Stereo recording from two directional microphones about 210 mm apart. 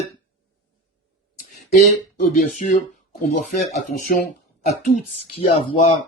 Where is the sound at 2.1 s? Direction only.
40° left (ahead or behind).